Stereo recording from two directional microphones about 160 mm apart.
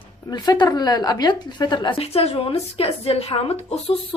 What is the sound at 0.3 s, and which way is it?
Speech, 25° left (ahead or behind).